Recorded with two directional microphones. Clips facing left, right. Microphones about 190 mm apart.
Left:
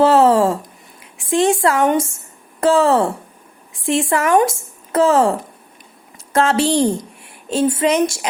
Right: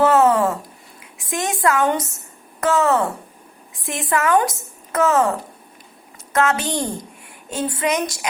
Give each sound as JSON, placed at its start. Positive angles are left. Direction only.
{"t": 0.0, "sound": "speech", "side_deg": 30}
{"t": 6.3, "sound": "a woman's voice", "side_deg": 30}